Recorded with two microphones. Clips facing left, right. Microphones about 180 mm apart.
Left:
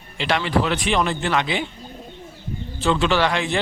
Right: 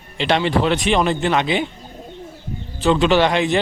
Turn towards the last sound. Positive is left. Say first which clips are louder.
# right 5 dB
turn(degrees=-20)  # may be behind; listen again after turning